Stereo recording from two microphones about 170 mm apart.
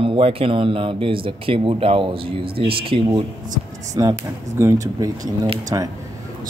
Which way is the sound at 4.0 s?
20° right (ahead or behind).